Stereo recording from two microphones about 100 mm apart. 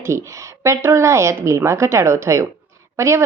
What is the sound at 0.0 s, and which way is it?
A woman's voice, 30° right (ahead or behind).